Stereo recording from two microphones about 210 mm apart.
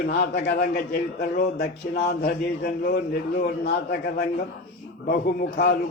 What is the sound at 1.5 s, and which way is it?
Speech, 45° left (ahead or behind).